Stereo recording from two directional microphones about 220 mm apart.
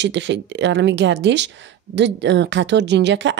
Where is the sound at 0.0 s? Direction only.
55° right (ahead or behind).